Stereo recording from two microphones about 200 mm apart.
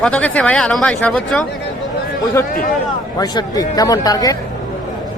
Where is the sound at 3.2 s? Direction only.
20° left (ahead or behind).